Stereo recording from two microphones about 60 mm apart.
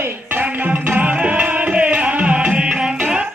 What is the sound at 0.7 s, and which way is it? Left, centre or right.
Music, right.